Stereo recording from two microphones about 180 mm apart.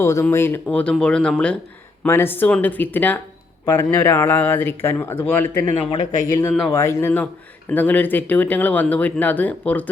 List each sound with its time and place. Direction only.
0.0 s speech: 15° left (ahead or behind)
5.7 s speech: 35° left (ahead or behind)
6.2 s speech: 15° left (ahead or behind)